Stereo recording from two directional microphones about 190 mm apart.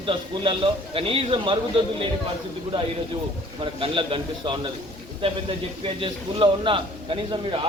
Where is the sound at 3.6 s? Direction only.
25° right (ahead or behind).